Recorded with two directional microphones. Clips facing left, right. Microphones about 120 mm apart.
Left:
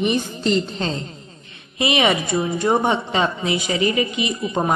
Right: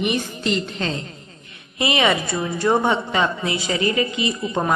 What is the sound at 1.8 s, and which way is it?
A woman's voice, 20° left (ahead or behind).